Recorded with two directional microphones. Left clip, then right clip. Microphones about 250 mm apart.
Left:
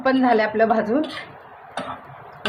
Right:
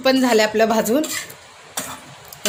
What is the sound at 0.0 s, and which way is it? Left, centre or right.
A woman's voice, right.